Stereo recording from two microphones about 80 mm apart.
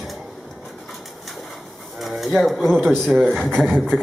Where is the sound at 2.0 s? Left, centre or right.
Centre.